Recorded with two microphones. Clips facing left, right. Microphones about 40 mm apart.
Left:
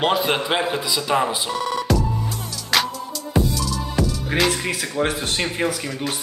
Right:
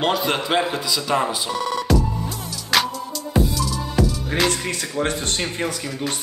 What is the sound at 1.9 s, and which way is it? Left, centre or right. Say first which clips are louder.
Music: right 1 dB; centre.